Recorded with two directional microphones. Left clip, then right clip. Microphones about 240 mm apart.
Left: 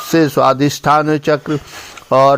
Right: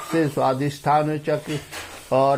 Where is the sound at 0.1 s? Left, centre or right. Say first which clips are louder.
Left 9 dB; left.